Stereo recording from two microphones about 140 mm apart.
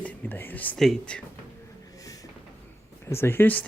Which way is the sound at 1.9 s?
25° left (ahead or behind).